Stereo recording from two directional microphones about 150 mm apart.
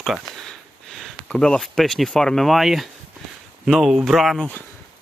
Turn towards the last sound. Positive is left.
turn(degrees=0)  # may be behind; listen again after turning